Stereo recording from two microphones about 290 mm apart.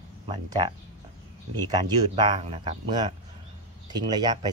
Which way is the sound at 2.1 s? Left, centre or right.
Centre.